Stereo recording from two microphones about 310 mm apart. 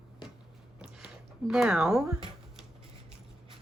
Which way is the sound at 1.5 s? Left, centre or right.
Centre.